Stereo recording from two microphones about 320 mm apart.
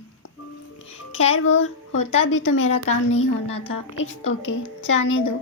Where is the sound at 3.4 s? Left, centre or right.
Centre.